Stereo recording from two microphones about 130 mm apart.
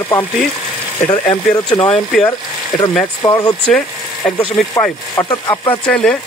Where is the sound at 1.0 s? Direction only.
15° left (ahead or behind).